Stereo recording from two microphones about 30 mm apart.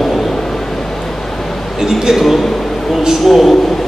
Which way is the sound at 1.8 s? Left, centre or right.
Centre.